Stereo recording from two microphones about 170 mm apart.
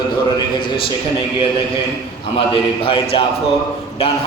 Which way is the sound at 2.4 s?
30° left (ahead or behind).